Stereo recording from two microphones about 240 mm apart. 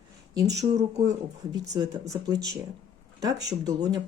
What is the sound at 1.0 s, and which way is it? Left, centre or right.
Speech, centre.